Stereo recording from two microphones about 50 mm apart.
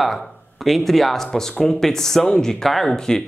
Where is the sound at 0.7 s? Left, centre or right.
Centre.